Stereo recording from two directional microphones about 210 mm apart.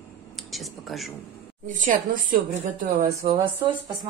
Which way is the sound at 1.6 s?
35° right (ahead or behind).